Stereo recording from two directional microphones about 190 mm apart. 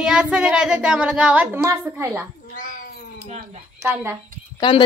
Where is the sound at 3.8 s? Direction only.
10° right (ahead or behind).